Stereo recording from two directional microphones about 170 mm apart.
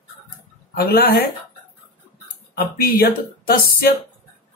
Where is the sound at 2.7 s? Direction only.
60° left (ahead or behind).